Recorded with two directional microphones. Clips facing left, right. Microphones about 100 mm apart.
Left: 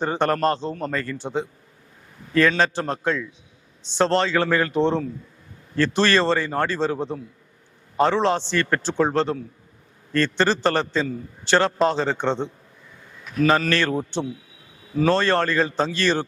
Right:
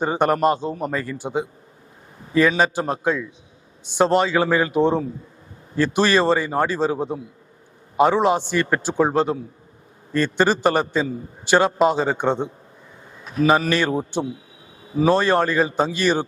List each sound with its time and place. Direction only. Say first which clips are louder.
0.0 s a man's voice: right 3 dB; 15° right (ahead or behind)
13.1 s a sound: right 1 dB; 30° right (ahead or behind)
13.4 s a man's voice: right 2 dB; 15° right (ahead or behind)